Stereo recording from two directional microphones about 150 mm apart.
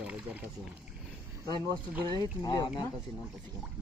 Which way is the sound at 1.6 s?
30° right (ahead or behind).